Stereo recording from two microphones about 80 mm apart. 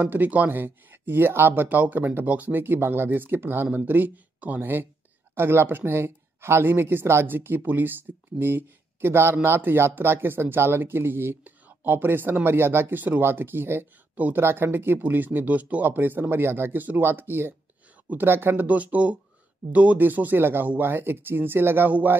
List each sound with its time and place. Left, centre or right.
0.0 s speech: right